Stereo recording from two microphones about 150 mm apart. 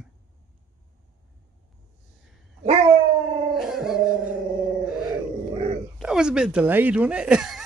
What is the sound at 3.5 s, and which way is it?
Dog, 5° right (ahead or behind).